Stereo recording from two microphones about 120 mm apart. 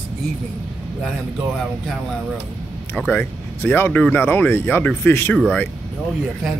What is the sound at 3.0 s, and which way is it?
Speech, 15° left (ahead or behind).